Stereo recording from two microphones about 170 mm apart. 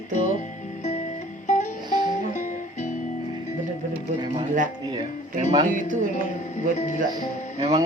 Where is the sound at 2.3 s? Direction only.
45° left (ahead or behind).